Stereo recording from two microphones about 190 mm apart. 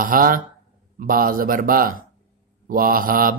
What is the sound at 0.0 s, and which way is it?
A man's voice, 45° right (ahead or behind).